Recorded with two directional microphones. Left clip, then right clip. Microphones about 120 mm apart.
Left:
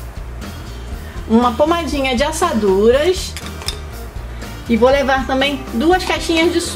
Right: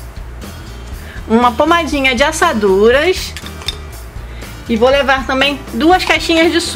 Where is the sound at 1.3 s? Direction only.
35° right (ahead or behind).